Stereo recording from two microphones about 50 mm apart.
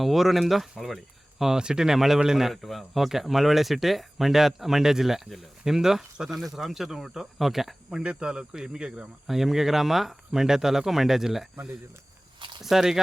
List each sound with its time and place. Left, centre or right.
0.0 s speech: centre
7.9 s speech: centre
9.2 s speech: centre
12.6 s speech: centre